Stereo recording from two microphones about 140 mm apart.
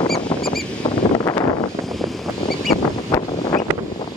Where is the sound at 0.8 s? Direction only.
30° left (ahead or behind).